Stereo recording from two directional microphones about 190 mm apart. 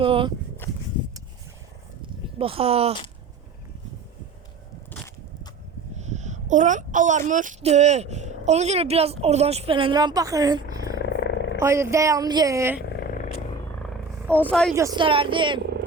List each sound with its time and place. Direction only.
0.0 s speech: 25° right (ahead or behind)
0.6 s a sound: 10° left (ahead or behind)
2.4 s speech: 30° right (ahead or behind)
4.9 s a sound: 10° left (ahead or behind)
6.0 s speech: 40° right (ahead or behind); by 11.0 s 20° right (ahead or behind)
11.2 s roar: 70° left (ahead or behind)
11.6 s speech: 15° right (ahead or behind)
13.0 s a sound: 45° left (ahead or behind)
14.3 s speech: 5° left (ahead or behind)
14.8 s a woman's voice: 20° right (ahead or behind)